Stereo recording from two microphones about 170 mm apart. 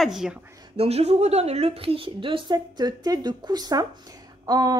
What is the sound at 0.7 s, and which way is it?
A woman's voice, 35° right (ahead or behind).